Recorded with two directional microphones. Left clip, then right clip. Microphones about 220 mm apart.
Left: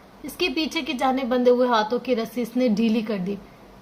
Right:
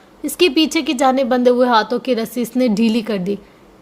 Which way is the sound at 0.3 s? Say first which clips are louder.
Right 10 dB; 40° right (ahead or behind).